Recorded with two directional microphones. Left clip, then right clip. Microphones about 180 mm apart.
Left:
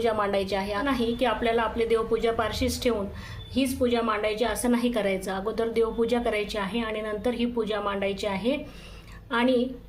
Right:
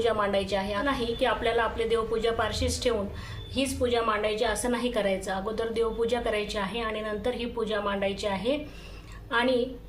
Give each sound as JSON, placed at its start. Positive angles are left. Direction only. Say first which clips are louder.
{"t": 0.0, "sound": "a woman's voice", "louder": "left 1 dB", "side_deg": 35}